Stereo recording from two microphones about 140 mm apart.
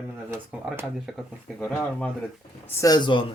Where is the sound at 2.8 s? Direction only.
30° left (ahead or behind).